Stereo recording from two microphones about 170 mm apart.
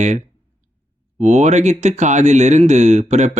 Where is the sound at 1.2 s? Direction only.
40° right (ahead or behind).